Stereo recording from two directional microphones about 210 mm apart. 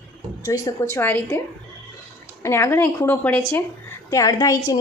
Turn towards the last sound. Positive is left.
turn(degrees=15)  # may be behind; listen again after turning